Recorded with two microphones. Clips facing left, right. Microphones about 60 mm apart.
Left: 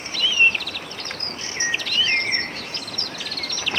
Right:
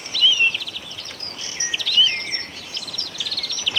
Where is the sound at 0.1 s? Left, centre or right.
Left.